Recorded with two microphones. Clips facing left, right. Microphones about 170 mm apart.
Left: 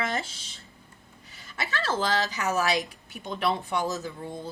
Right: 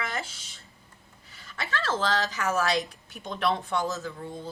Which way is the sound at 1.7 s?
15° left (ahead or behind).